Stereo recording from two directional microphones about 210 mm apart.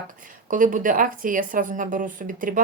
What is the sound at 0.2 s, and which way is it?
A woman's voice, 40° right (ahead or behind).